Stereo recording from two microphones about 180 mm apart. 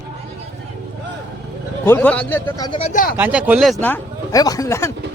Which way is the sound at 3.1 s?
10° right (ahead or behind).